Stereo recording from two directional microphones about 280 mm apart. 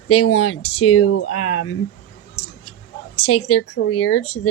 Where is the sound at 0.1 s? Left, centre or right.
Left.